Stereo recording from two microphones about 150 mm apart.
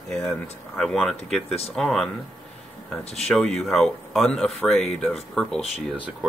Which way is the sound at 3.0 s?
45° left (ahead or behind).